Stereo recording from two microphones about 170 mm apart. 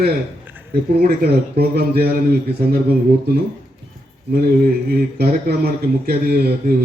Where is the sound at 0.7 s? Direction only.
65° right (ahead or behind).